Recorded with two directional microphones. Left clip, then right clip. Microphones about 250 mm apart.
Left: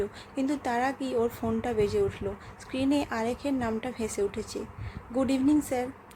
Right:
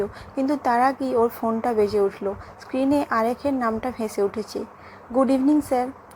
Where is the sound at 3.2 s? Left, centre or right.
Centre.